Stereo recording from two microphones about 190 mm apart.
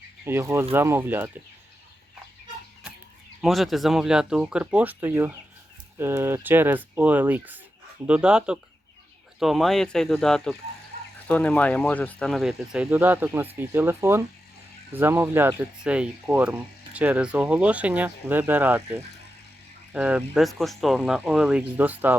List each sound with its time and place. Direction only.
0.3 s speech: 15° right (ahead or behind)
3.4 s speech: centre (ahead or behind)
19.9 s speech: 5° right (ahead or behind)